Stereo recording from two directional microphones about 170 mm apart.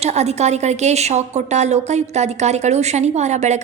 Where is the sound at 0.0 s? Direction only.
40° right (ahead or behind).